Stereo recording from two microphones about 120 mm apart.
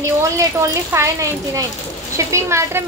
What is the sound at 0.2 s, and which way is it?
Speech, 25° right (ahead or behind).